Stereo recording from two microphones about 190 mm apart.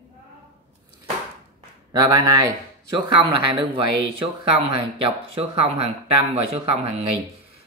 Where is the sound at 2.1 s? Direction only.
20° right (ahead or behind).